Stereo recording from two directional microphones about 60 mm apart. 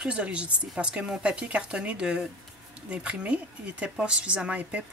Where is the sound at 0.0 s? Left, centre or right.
Centre.